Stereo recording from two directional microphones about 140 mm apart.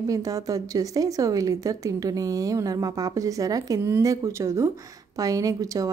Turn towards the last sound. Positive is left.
turn(degrees=-25)  # may be behind; listen again after turning